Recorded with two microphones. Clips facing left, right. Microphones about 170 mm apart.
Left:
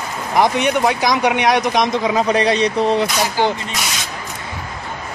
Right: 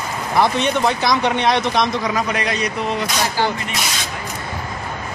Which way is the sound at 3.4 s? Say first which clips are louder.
Left 3 dB; 15° left (ahead or behind).